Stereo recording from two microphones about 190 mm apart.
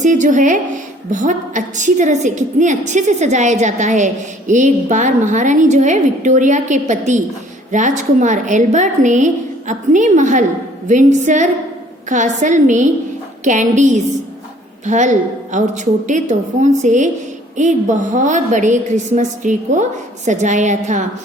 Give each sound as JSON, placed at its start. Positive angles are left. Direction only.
{"t": 0.0, "sound": "a woman's voice", "side_deg": -40}